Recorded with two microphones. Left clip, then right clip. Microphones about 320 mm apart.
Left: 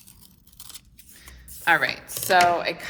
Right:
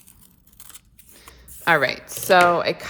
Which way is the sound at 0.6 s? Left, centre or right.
Centre.